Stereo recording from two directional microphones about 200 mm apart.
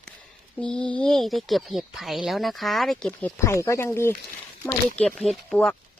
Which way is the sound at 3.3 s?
15° left (ahead or behind).